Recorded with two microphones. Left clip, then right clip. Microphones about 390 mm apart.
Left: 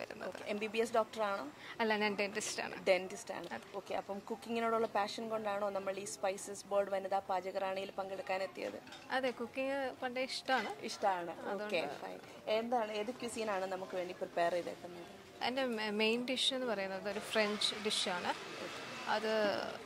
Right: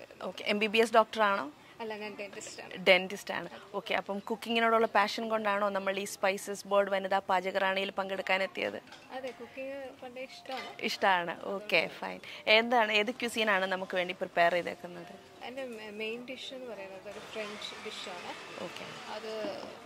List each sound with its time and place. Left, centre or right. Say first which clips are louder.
0.4 s speech: right 10 dB; right
1.8 s speech: left 6 dB; left
2.8 s speech: right 9 dB; right
9.1 s speech: left 4 dB; left
10.8 s speech: right 8 dB; right
15.4 s speech: left 5 dB; left